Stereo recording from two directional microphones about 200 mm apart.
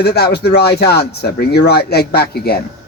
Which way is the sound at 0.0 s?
55° left (ahead or behind).